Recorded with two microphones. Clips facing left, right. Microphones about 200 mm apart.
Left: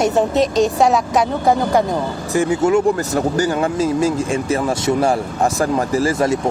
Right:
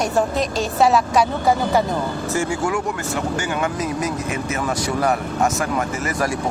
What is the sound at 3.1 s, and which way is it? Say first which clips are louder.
Speech: left 6 dB; 35° left (ahead or behind).